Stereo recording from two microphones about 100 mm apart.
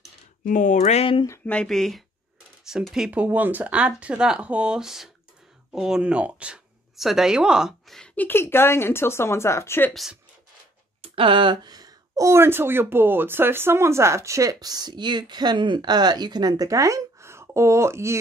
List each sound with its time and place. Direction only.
0.9 s speech: 65° left (ahead or behind)
1.4 s speech: 10° left (ahead or behind); by 3.1 s 5° right (ahead or behind)
3.1 s speech: 15° right (ahead or behind)
8.0 s speech: 20° left (ahead or behind)
11.0 s speech: 60° right (ahead or behind); by 18.1 s 25° right (ahead or behind)